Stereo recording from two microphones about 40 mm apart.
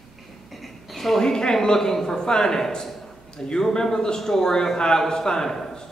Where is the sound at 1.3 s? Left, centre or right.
Centre.